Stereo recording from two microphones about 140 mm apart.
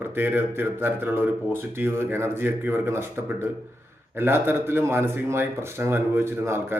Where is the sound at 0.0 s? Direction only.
15° right (ahead or behind).